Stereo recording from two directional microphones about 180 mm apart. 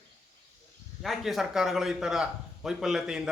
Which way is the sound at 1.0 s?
Centre (ahead or behind).